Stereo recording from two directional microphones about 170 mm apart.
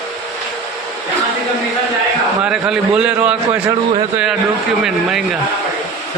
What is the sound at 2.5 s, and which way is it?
A man's voice, 5° right (ahead or behind).